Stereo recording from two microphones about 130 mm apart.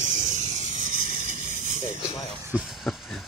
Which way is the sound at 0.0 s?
75° right (ahead or behind).